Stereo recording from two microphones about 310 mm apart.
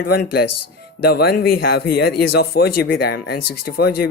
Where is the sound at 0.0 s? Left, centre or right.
Left.